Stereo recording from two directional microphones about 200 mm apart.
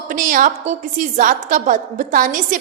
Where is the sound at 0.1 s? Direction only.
40° right (ahead or behind).